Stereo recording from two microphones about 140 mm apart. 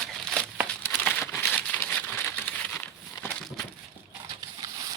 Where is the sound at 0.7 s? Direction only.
10° left (ahead or behind).